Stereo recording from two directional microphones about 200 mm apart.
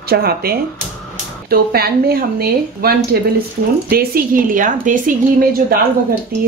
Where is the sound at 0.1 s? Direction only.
50° right (ahead or behind).